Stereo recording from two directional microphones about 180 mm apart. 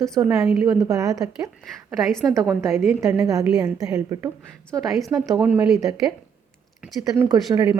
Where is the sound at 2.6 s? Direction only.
15° right (ahead or behind).